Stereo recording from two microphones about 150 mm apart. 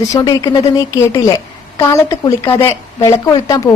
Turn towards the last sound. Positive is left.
turn(degrees=25)  # may be behind; listen again after turning